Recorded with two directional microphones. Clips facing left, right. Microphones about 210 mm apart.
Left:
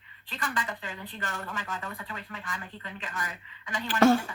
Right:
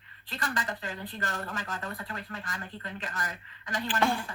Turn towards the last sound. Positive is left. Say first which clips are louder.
# left 7 dB
turn(degrees=45)  # may be behind; listen again after turning